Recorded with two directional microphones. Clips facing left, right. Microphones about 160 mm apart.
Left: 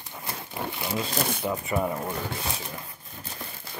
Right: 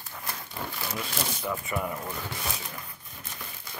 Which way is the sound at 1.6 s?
30° left (ahead or behind).